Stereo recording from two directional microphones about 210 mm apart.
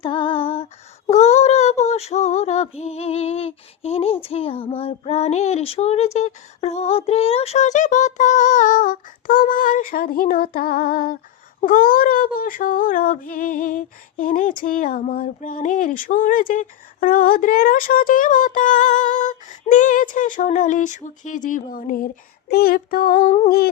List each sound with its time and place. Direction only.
0.0 s female singing: 25° left (ahead or behind); by 23.3 s 45° left (ahead or behind)